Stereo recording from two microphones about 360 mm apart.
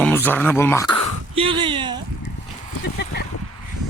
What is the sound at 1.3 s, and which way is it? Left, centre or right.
Speech, centre.